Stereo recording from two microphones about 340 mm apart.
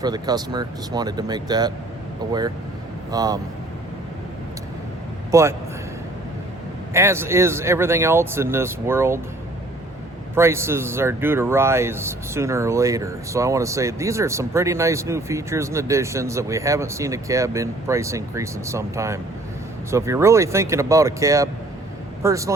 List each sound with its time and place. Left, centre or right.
0.0 s speech: centre
3.1 s speech: centre
5.3 s a man's voice: centre
6.9 s speech: centre
10.3 s speech: centre